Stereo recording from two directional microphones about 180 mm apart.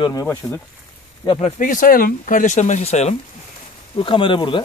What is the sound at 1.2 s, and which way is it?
Speech, 25° left (ahead or behind).